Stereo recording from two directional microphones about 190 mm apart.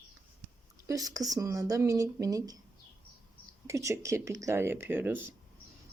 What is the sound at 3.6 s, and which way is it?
Speech, 15° right (ahead or behind).